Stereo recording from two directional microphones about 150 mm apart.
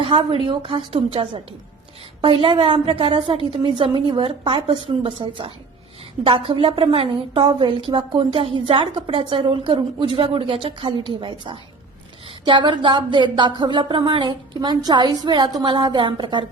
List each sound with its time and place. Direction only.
0.0 s speech: 35° right (ahead or behind)